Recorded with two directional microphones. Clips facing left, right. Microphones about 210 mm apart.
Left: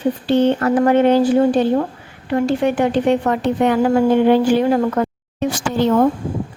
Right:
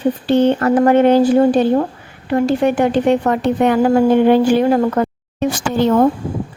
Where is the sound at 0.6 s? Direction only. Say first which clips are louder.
Right 2 dB; 50° right (ahead or behind).